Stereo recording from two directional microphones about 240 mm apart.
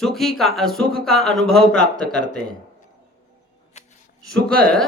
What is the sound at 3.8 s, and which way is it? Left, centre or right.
Shuffling cards, left.